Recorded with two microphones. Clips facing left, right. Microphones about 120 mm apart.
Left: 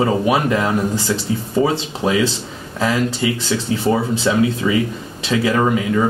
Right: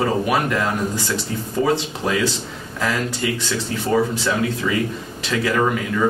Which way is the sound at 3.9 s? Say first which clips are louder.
Left 1 dB; 20° left (ahead or behind).